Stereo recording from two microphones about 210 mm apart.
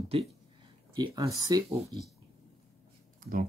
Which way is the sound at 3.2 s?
45° right (ahead or behind).